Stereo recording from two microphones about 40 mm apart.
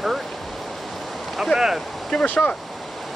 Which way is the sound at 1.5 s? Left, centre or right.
Centre.